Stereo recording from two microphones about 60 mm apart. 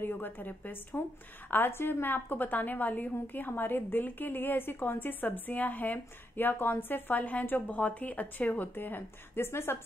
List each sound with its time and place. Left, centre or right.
0.0 s a woman's voice: left